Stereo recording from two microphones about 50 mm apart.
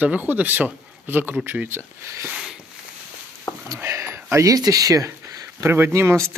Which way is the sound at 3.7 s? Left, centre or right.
Right.